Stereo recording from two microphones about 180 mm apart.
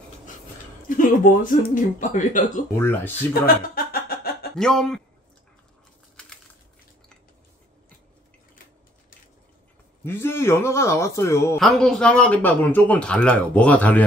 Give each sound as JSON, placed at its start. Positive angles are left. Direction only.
{"t": 0.8, "sound": "speech", "side_deg": 50}
{"t": 2.8, "sound": "speech", "side_deg": 10}
{"t": 3.4, "sound": "music", "side_deg": 55}
{"t": 4.6, "sound": "a man's voice", "side_deg": 5}
{"t": 10.0, "sound": "speech", "side_deg": 15}
{"t": 11.6, "sound": "speech", "side_deg": 0}